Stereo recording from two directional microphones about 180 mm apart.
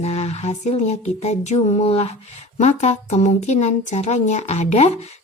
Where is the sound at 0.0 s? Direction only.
35° left (ahead or behind).